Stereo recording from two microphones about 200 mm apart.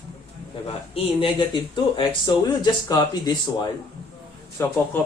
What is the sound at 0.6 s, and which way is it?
A man's voice, 30° left (ahead or behind).